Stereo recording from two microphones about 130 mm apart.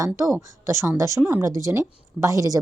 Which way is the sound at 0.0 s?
25° right (ahead or behind).